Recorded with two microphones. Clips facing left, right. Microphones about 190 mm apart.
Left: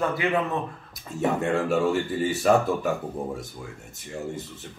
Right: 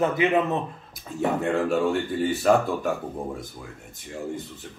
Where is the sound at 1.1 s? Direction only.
Centre (ahead or behind).